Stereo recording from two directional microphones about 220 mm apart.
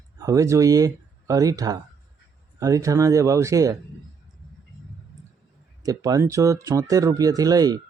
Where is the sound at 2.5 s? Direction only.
15° right (ahead or behind).